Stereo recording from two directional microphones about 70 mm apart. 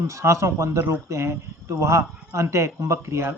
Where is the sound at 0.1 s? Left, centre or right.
Right.